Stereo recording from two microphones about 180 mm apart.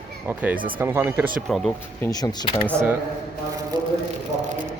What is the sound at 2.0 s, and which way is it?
Speech, 20° left (ahead or behind).